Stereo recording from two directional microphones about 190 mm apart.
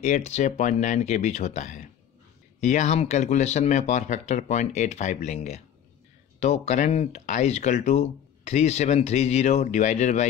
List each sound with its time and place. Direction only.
0.0 s speech: 35° left (ahead or behind)